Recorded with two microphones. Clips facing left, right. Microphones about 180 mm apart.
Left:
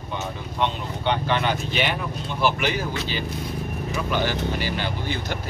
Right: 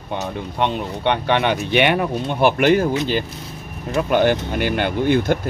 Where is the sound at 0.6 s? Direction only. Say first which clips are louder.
Right 4 dB; 65° right (ahead or behind).